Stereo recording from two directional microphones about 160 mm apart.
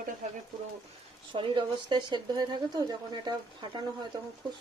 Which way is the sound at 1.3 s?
30° right (ahead or behind).